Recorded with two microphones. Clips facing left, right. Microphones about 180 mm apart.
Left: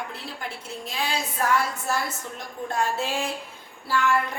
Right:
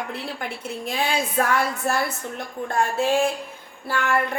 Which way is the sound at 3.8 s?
55° right (ahead or behind).